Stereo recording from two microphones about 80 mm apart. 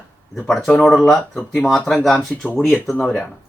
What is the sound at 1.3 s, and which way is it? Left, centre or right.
Speech, left.